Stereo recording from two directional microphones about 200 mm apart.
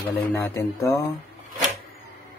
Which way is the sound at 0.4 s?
15° left (ahead or behind).